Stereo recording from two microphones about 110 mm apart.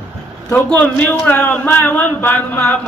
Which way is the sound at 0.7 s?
15° left (ahead or behind).